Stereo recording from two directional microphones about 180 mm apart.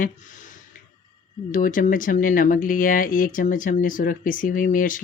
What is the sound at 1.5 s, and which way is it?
Speech, 50° left (ahead or behind).